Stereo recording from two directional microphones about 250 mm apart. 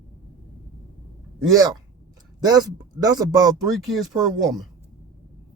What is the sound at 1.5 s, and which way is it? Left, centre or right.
Speech, centre.